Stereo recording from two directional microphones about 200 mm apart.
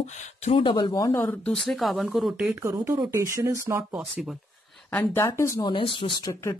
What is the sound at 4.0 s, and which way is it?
Speech, centre (ahead or behind).